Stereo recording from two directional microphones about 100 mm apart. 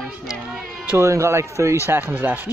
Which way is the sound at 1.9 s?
20° right (ahead or behind).